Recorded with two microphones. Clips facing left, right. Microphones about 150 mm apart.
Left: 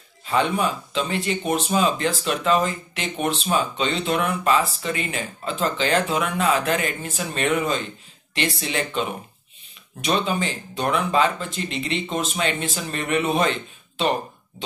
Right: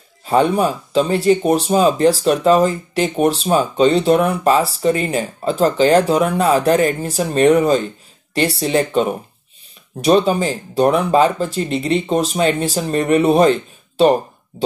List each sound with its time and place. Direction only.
0.2 s speech: 35° right (ahead or behind)